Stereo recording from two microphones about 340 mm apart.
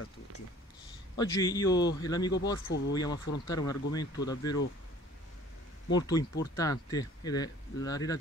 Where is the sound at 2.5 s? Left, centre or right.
Left.